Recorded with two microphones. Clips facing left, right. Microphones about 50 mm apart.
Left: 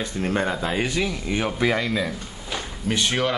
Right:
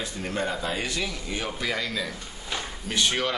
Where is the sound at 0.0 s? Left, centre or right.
Left.